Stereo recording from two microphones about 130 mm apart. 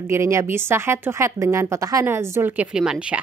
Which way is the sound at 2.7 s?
5° right (ahead or behind).